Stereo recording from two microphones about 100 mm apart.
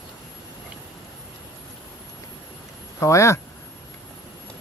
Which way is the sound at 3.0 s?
30° left (ahead or behind).